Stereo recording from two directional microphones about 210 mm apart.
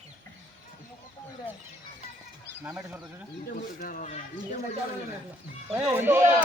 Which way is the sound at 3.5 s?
40° left (ahead or behind).